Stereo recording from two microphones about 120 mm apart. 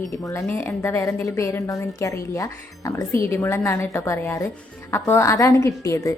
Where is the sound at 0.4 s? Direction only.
15° left (ahead or behind).